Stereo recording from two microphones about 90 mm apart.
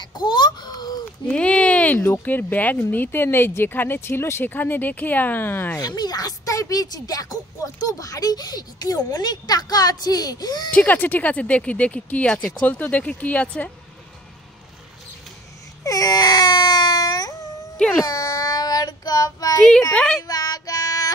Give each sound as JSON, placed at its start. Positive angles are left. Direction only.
{"t": 0.0, "sound": "a sound", "side_deg": 55}
{"t": 1.2, "sound": "speech", "side_deg": 15}
{"t": 5.8, "sound": "speech", "side_deg": 50}
{"t": 10.7, "sound": "speech", "side_deg": 20}
{"t": 15.8, "sound": "baby cry", "side_deg": 40}
{"t": 17.7, "sound": "speech", "side_deg": 10}
{"t": 18.0, "sound": "child singing", "side_deg": 45}
{"t": 19.9, "sound": "speech", "side_deg": 10}
{"t": 20.2, "sound": "child singing", "side_deg": 45}